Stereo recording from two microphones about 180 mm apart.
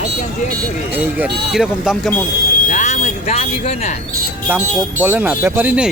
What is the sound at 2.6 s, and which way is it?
Speech, 40° left (ahead or behind).